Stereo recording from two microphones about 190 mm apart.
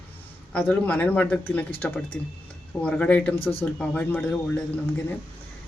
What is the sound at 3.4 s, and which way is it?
Speech, 30° left (ahead or behind).